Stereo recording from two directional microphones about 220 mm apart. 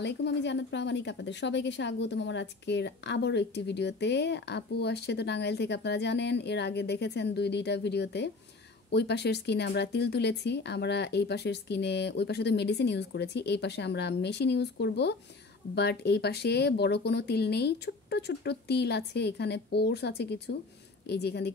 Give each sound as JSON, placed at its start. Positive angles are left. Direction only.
{"t": 0.0, "sound": "a woman's voice", "side_deg": 50}